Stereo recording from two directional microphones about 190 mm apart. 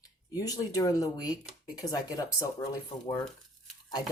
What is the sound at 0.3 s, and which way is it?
Speech, 20° left (ahead or behind).